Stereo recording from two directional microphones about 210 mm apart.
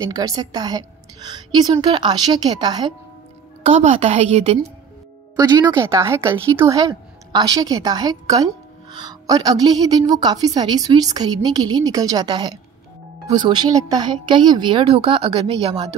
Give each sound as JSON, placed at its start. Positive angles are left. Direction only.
{"t": 0.0, "sound": "a woman's voice", "side_deg": -15}
{"t": 3.6, "sound": "a woman's voice", "side_deg": -35}
{"t": 5.3, "sound": "a woman's voice", "side_deg": -20}